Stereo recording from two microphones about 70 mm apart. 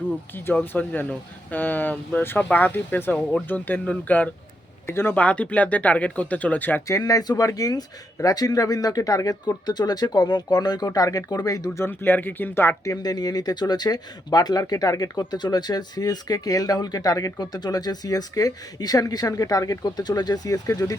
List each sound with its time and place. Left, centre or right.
0.6 s speech: left
4.9 s speech: left
5.1 s speech: centre
6.8 s speech: left
11.9 s speech: left
12.8 s speech: left
20.7 s speech: left